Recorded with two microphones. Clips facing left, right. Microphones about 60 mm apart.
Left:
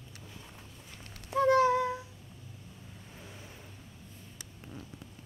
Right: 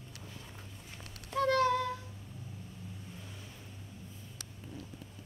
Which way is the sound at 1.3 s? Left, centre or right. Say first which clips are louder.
Left 4 dB; centre.